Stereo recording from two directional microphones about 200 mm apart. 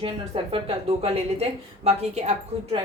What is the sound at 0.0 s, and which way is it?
A woman's voice, 25° right (ahead or behind).